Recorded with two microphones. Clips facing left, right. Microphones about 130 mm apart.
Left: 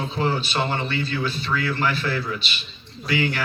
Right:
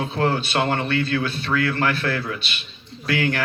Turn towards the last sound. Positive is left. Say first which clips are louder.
# right 1 dB
turn(degrees=-55)  # may be behind; listen again after turning